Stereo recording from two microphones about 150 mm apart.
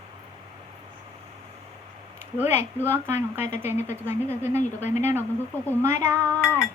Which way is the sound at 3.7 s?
50° left (ahead or behind).